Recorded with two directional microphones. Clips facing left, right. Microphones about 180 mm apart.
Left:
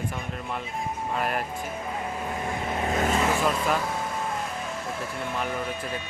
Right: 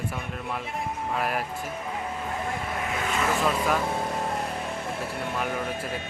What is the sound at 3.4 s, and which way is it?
Speech, centre (ahead or behind).